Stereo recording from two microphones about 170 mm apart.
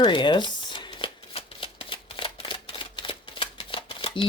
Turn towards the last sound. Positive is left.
turn(degrees=30)  # may be behind; listen again after turning